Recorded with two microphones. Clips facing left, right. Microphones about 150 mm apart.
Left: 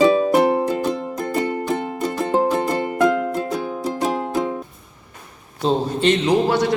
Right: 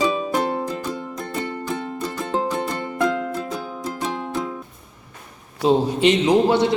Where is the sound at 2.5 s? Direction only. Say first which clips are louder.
Left 5 dB; 45° left (ahead or behind).